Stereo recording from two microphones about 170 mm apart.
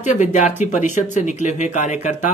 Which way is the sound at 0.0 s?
45° left (ahead or behind).